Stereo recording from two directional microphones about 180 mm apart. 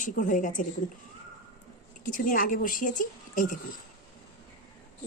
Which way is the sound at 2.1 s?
50° left (ahead or behind).